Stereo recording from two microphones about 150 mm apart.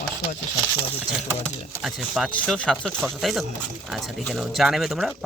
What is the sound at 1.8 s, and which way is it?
Speech, centre (ahead or behind).